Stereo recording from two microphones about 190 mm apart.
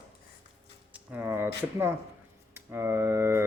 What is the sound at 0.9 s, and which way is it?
Speech, 10° right (ahead or behind).